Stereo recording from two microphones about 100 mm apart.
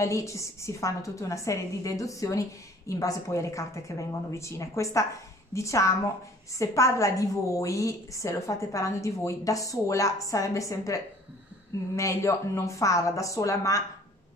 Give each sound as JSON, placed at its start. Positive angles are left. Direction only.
{"t": 0.0, "sound": "a woman's voice", "side_deg": 30}